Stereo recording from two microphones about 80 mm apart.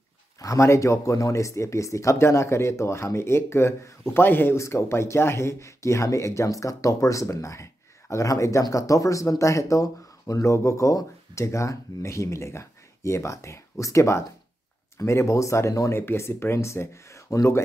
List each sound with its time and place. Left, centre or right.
0.4 s speech: left